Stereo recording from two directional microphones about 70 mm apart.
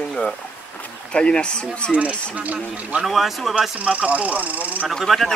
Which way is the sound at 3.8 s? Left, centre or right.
Centre.